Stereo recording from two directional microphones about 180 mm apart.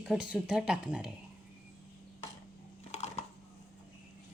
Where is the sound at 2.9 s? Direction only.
40° left (ahead or behind).